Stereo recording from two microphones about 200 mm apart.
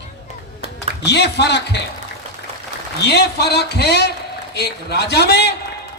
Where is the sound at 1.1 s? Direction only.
60° left (ahead or behind).